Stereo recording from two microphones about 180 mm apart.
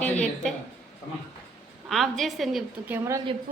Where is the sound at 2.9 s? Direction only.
15° right (ahead or behind).